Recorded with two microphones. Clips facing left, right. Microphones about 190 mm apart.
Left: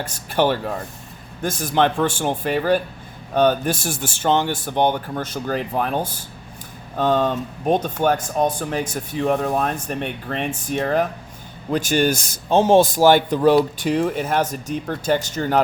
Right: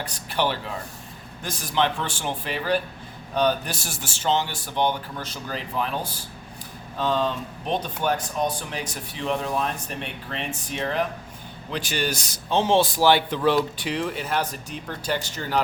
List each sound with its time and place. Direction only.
0.0 s speech: 50° left (ahead or behind)